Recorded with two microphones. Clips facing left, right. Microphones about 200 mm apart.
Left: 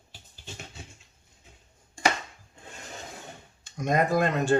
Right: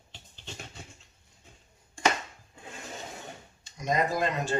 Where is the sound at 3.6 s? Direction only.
50° left (ahead or behind).